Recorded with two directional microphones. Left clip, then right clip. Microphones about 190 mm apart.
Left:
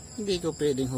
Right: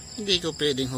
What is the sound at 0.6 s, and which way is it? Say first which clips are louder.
Speech: right 2 dB; 15° left (ahead or behind).